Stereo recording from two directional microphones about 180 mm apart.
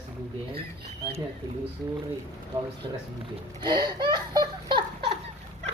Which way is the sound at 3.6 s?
25° right (ahead or behind).